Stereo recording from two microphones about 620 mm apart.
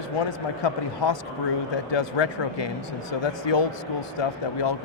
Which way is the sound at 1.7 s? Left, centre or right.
Left.